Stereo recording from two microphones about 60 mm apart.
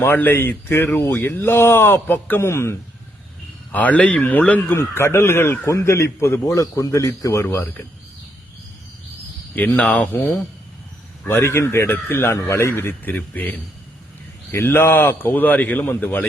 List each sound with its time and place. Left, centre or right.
0.0 s a man's voice: left
2.4 s speech: left
3.7 s speech: left
4.7 s a man's voice: left
9.6 s speech: left
11.9 s a man's voice: left
12.3 s a man's voice: left
12.7 s speech: left
14.5 s a man's voice: left